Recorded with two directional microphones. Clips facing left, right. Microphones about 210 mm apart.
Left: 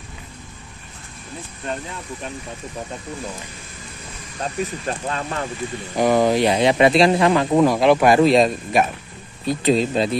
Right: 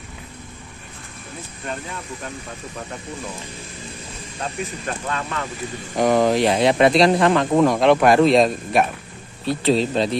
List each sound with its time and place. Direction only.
4.8 s speech: 30° left (ahead or behind)
5.9 s speech: centre (ahead or behind)
9.5 s speech: 15° left (ahead or behind)